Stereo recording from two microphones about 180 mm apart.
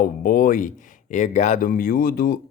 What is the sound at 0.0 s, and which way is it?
Speech, 50° left (ahead or behind).